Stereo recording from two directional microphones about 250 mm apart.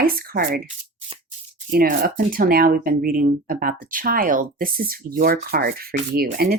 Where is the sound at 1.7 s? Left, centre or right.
Right.